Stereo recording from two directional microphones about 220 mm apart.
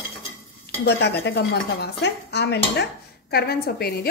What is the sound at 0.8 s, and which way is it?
Speech, 50° left (ahead or behind).